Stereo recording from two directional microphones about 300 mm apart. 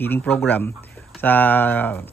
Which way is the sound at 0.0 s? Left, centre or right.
Centre.